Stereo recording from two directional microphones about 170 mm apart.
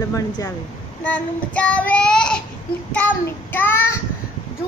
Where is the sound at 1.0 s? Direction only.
10° left (ahead or behind).